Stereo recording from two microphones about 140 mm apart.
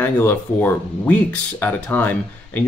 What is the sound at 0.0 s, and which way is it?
Speech, 15° left (ahead or behind).